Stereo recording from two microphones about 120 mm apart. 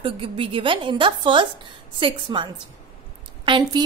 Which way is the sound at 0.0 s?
50° right (ahead or behind).